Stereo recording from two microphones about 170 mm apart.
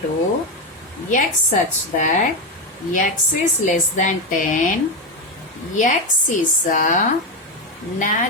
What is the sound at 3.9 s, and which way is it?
Speech, 50° left (ahead or behind).